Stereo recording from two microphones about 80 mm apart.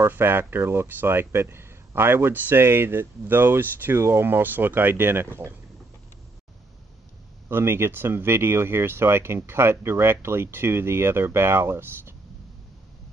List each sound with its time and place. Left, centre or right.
0.0 s speech: right
7.4 s speech: right